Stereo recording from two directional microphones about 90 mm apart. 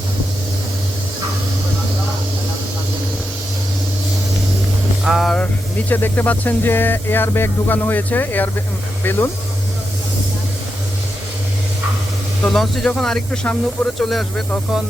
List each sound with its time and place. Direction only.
5.0 s vehicle: 5° right (ahead or behind)
5.9 s speech: 20° left (ahead or behind)
12.4 s speech: 5° left (ahead or behind)